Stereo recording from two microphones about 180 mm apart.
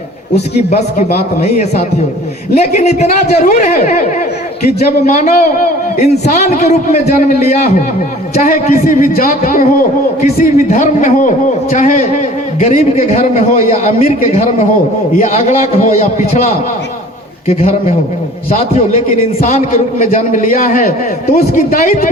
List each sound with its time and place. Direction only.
0.7 s a man's voice: 45° left (ahead or behind)
5.0 s a man's voice: 45° left (ahead or behind)
17.5 s a man's voice: 35° left (ahead or behind)
19.4 s a man's voice: 35° left (ahead or behind)